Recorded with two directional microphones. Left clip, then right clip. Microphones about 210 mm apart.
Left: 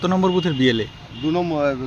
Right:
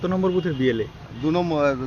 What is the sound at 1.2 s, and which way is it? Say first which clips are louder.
Speech: left 1 dB; 10° right (ahead or behind).